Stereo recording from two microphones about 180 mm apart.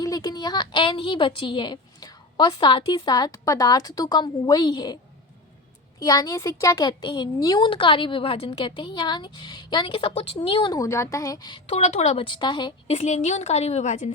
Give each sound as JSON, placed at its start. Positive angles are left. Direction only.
{"t": 0.0, "sound": "a woman's voice", "side_deg": 20}
{"t": 6.0, "sound": "a woman's voice", "side_deg": 20}